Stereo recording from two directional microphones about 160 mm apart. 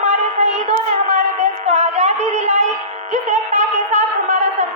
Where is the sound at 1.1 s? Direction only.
45° right (ahead or behind).